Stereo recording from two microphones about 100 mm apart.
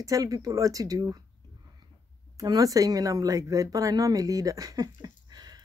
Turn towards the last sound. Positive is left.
turn(degrees=-40)  # may be behind; listen again after turning